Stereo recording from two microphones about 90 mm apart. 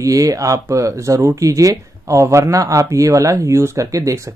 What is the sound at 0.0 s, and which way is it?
Speech, 40° right (ahead or behind).